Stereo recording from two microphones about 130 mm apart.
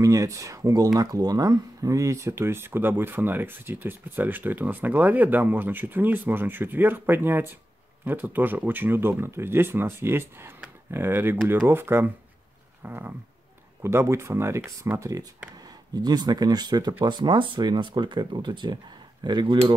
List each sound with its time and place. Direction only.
0.0 s speech: 25° right (ahead or behind)
10.6 s a sound: 15° right (ahead or behind)
11.6 s speech: 15° right (ahead or behind); by 19.6 s 35° right (ahead or behind)